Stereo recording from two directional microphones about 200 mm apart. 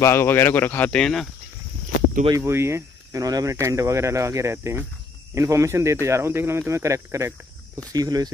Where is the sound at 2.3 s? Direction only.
15° right (ahead or behind).